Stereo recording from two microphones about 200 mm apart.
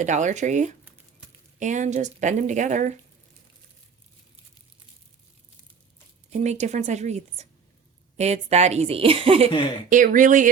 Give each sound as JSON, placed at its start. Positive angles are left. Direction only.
{"t": 0.0, "sound": "speech", "side_deg": -40}
{"t": 6.3, "sound": "speech", "side_deg": -35}
{"t": 9.9, "sound": "speech", "side_deg": -40}